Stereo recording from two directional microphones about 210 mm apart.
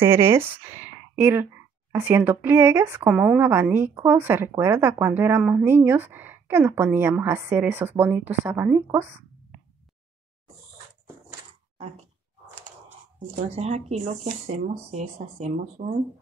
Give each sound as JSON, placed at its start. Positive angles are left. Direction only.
{"t": 0.0, "sound": "a woman's voice", "side_deg": -10}
{"t": 13.6, "sound": "speech", "side_deg": -30}